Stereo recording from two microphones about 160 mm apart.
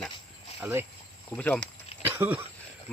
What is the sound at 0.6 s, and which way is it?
Speech, 15° right (ahead or behind).